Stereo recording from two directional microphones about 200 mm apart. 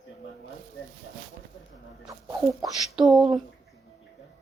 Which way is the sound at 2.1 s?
20° right (ahead or behind).